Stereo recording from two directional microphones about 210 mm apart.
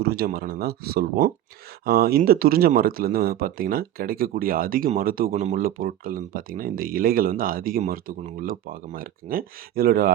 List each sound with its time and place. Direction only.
0.0 s speech: 50° right (ahead or behind)
5.3 s speech: 30° right (ahead or behind)